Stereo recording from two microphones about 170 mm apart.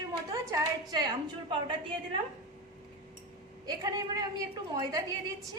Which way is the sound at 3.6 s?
20° right (ahead or behind).